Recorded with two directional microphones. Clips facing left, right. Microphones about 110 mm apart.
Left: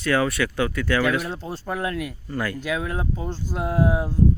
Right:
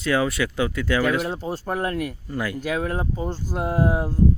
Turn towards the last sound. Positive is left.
turn(degrees=-5)  # may be behind; listen again after turning